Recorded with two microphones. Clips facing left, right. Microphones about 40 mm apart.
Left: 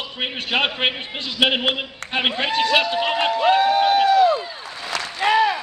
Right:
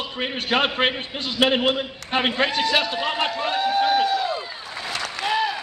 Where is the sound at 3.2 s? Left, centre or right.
Left.